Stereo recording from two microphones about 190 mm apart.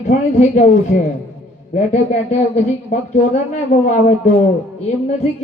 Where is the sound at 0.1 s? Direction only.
40° left (ahead or behind).